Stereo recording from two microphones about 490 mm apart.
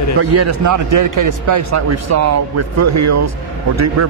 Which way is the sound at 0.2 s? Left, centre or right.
Right.